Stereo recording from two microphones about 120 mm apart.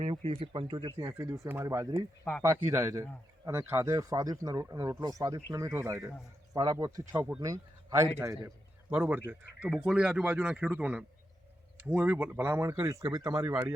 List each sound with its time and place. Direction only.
0.0 s speech: 55° right (ahead or behind)
0.7 s speech: 40° right (ahead or behind)
0.9 s speech: 25° right (ahead or behind)
6.6 s a man's voice: 35° right (ahead or behind)
13.4 s speech: 15° right (ahead or behind)